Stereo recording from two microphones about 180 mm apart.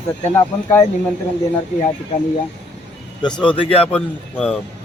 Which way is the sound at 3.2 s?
25° left (ahead or behind).